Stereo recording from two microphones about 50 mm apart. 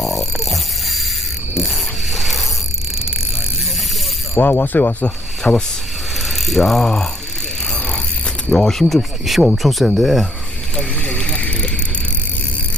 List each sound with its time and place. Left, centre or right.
0.0 s mains hum: centre
1.5 s a sound: centre
4.4 s speech: left
5.4 s speech: centre
6.2 s ratchet: centre
7.7 s mechanisms: centre
8.4 s speech: centre
10.8 s vehicle: left
11.4 s bicycle: left